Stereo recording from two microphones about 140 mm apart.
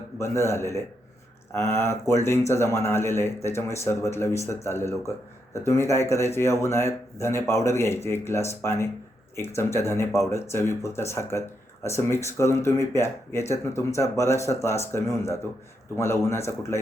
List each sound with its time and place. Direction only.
0.2 s speech: 20° left (ahead or behind)